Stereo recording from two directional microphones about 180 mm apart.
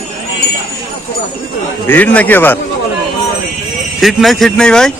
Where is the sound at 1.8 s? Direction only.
10° left (ahead or behind).